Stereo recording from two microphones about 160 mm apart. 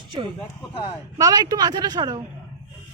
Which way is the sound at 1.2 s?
25° right (ahead or behind).